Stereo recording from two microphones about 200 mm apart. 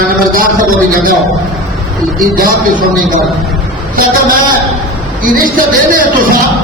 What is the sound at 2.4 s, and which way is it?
Speech, 45° right (ahead or behind).